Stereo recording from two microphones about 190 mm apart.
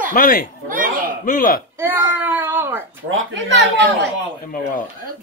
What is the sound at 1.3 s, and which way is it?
Speech, 50° left (ahead or behind).